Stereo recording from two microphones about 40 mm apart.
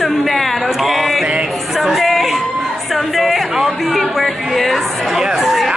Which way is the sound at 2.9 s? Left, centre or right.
Centre.